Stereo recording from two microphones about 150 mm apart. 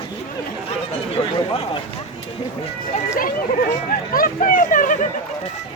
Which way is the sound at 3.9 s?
70° left (ahead or behind).